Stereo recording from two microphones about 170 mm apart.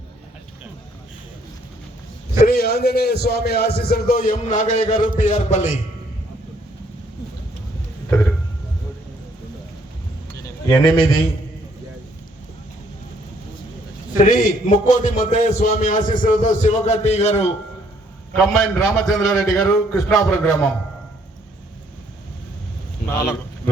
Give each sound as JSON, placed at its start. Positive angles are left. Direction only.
{"t": 2.4, "sound": "a man's voice", "side_deg": 60}
{"t": 10.7, "sound": "a man's voice", "side_deg": 15}
{"t": 14.2, "sound": "a man's voice", "side_deg": 50}
{"t": 18.3, "sound": "a man's voice", "side_deg": 5}
{"t": 19.5, "sound": "a man's voice", "side_deg": 10}
{"t": 23.2, "sound": "a sound", "side_deg": 15}